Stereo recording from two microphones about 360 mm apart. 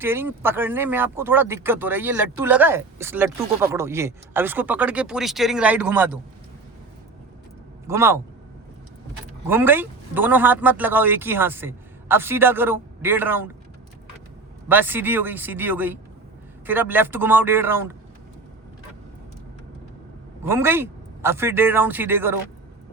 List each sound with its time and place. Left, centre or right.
0.0 s speech: centre
7.9 s a man's voice: centre
9.5 s speech: centre
14.7 s speech: centre
20.4 s a man's voice: centre